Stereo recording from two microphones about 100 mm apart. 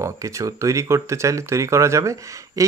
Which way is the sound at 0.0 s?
30° right (ahead or behind).